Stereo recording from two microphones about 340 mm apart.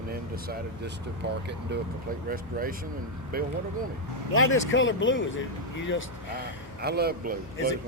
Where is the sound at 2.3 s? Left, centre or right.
Right.